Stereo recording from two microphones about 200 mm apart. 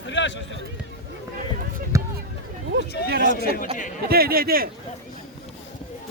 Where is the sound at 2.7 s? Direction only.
55° right (ahead or behind).